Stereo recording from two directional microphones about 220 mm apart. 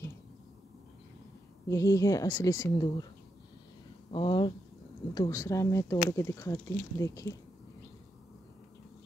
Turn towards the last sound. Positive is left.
turn(degrees=15)  # may be behind; listen again after turning